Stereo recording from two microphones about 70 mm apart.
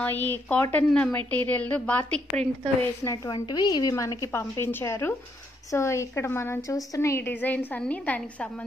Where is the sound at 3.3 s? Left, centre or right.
Left.